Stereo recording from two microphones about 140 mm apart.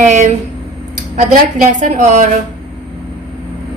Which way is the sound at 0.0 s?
60° right (ahead or behind).